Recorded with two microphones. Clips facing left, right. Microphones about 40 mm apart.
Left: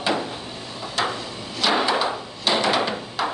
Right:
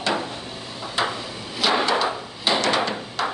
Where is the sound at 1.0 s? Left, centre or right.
Centre.